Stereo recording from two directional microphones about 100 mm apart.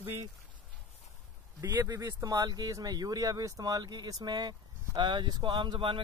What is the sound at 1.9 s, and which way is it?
Speech, 35° right (ahead or behind).